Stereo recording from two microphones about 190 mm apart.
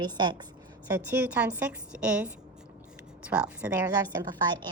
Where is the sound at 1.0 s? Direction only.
10° right (ahead or behind).